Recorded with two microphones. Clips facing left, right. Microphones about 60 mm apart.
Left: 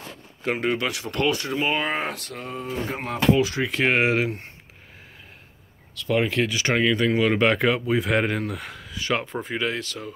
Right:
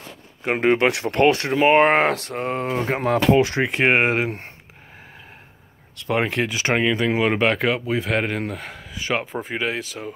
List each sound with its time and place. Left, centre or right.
0.6 s speech: right
3.1 s speech: right
3.4 s speech: right
5.9 s speech: right
7.4 s speech: centre
8.9 s speech: centre